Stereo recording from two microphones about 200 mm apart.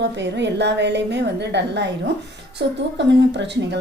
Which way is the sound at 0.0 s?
60° right (ahead or behind).